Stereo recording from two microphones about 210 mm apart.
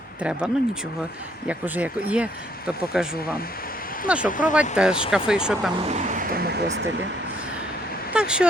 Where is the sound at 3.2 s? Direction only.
45° left (ahead or behind).